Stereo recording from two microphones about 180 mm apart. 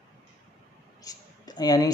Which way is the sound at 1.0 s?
20° left (ahead or behind).